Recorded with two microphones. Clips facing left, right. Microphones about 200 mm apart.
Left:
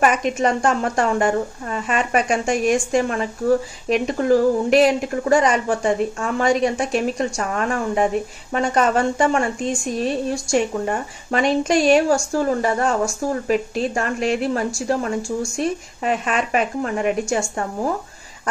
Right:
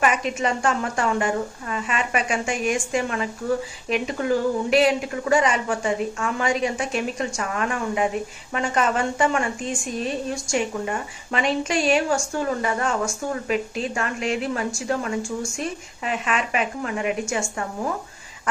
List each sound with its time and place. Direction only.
0.0 s a woman's voice: 45° left (ahead or behind)